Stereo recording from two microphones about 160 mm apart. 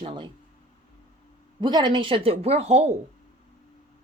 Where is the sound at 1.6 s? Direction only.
30° right (ahead or behind).